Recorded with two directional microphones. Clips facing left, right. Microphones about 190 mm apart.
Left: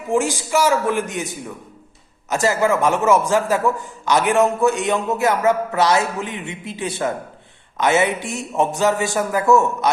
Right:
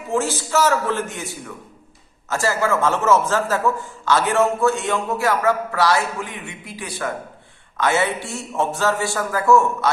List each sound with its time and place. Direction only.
0.1 s a man's voice: 15° left (ahead or behind)